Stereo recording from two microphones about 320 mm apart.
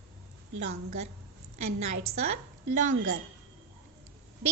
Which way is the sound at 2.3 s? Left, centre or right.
Right.